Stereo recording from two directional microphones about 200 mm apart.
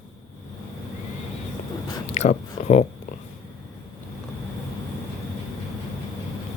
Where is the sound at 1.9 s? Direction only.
30° left (ahead or behind).